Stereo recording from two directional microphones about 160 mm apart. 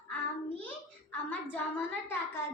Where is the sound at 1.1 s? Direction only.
10° left (ahead or behind).